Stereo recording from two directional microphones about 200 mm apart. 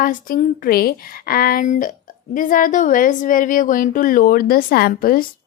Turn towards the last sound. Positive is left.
turn(degrees=45)  # may be behind; listen again after turning